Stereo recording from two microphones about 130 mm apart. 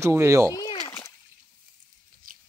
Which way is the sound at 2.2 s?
90° right.